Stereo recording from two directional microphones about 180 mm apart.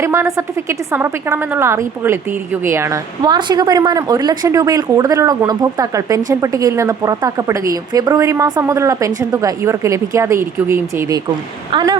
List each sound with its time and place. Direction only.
0.0 s a woman's voice: 15° right (ahead or behind)